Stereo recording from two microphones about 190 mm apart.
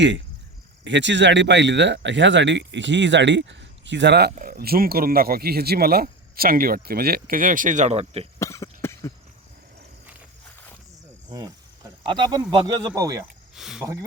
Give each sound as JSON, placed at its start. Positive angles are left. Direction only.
{"t": 0.9, "sound": "speech", "side_deg": -70}
{"t": 4.4, "sound": "speech", "side_deg": -50}
{"t": 8.4, "sound": "cough", "side_deg": 15}
{"t": 11.3, "sound": "speech", "side_deg": -20}
{"t": 13.6, "sound": "a sound", "side_deg": 0}